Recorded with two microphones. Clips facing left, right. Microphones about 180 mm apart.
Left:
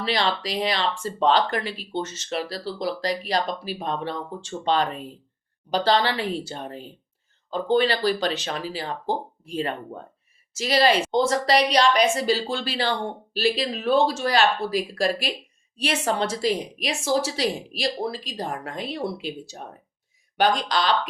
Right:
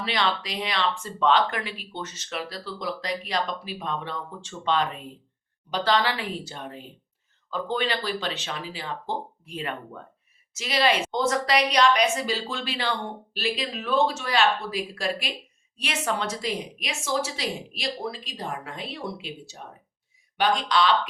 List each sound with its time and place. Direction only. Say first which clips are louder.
0.0 s speech: left 2 dB; 35° left (ahead or behind)